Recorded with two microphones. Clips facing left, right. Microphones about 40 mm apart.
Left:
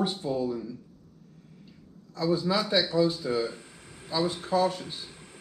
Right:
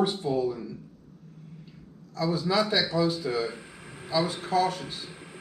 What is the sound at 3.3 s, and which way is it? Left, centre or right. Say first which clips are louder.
Speech: left 1 dB; right.